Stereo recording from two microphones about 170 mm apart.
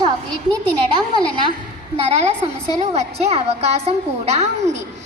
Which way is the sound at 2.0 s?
35° right (ahead or behind).